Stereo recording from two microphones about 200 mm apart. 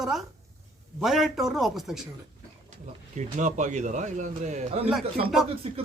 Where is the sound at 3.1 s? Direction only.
35° right (ahead or behind).